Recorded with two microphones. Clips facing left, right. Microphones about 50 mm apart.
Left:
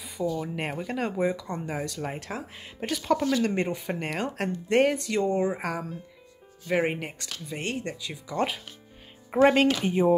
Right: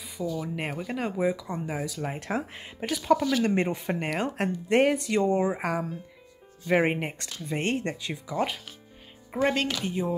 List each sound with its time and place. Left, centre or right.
0.0 s speech: centre
2.1 s speech: right
2.8 s speech: centre
3.4 s speech: centre
9.3 s speech: centre